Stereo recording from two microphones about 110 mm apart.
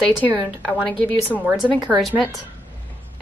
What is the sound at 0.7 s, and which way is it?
Speech, 10° left (ahead or behind).